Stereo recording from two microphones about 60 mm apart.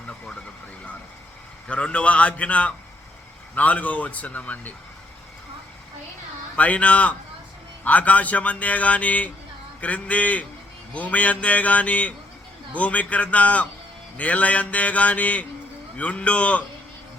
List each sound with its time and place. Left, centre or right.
1.6 s a man's voice: centre
6.6 s a man's voice: left